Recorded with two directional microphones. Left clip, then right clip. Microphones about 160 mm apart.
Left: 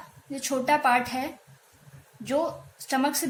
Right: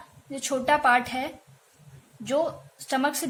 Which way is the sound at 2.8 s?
30° right (ahead or behind).